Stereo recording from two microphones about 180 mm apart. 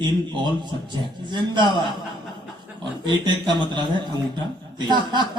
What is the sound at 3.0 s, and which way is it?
Speech, 25° right (ahead or behind).